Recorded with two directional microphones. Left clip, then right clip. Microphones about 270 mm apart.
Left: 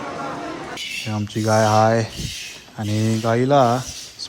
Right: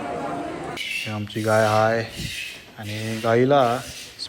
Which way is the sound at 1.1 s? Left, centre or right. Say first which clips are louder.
Left 3 dB; centre.